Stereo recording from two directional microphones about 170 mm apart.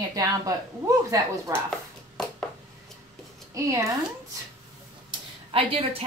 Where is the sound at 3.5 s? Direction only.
15° right (ahead or behind).